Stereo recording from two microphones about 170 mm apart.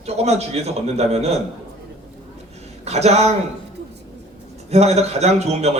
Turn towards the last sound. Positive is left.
turn(degrees=-40)  # may be behind; listen again after turning